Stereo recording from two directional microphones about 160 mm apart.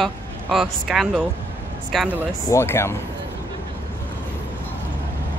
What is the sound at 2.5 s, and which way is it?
Speech, 15° left (ahead or behind).